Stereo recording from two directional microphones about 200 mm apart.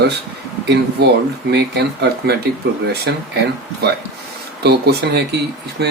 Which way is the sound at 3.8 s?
55° right (ahead or behind).